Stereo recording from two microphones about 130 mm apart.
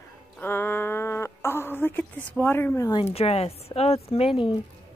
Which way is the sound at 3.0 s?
50° left (ahead or behind).